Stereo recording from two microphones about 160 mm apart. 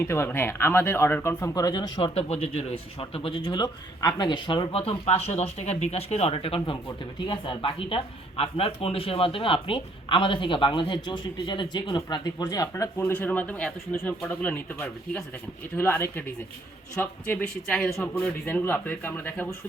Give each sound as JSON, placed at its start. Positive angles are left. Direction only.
{"t": 0.0, "sound": "speech", "side_deg": 15}
{"t": 2.1, "sound": "speech", "side_deg": 40}
{"t": 18.2, "sound": "speech", "side_deg": 10}